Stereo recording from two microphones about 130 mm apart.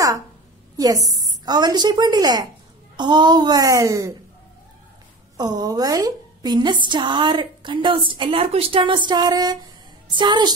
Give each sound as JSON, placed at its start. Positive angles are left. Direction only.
{"t": 0.7, "sound": "a woman's voice", "side_deg": -30}
{"t": 5.4, "sound": "a woman's voice", "side_deg": -30}